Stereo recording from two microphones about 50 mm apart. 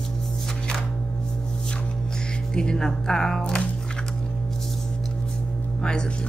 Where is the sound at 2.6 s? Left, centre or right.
Centre.